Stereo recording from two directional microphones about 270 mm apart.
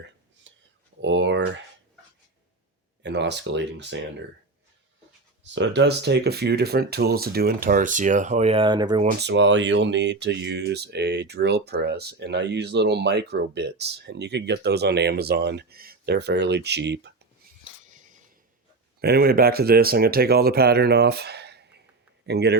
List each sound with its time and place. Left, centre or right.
0.5 s a sound: right
1.0 s speech: right
3.0 s speech: right
5.4 s speech: right; by 9.0 s centre
9.0 s speech: right
17.8 s a sound: right
18.9 s speech: right